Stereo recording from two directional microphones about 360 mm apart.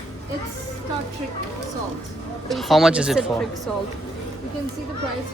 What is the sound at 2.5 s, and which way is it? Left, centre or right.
Speech, centre.